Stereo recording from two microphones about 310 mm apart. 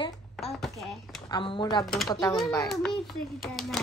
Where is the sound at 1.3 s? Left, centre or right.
Centre.